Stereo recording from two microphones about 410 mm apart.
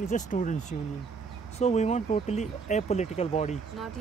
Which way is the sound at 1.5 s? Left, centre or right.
Centre.